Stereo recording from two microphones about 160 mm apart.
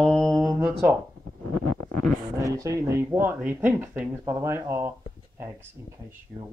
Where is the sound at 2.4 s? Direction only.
20° right (ahead or behind).